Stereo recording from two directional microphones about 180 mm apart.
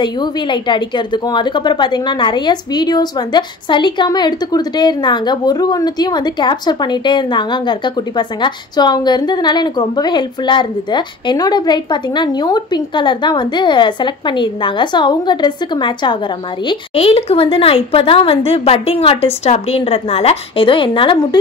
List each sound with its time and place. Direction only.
0.0 s a woman's voice: 25° left (ahead or behind)